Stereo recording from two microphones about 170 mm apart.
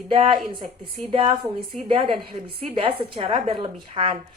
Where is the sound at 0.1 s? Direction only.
30° right (ahead or behind).